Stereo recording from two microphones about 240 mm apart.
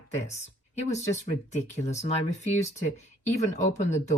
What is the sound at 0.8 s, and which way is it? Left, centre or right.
Speech, left.